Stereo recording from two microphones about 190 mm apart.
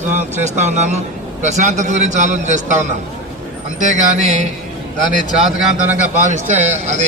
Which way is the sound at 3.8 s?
40° right (ahead or behind).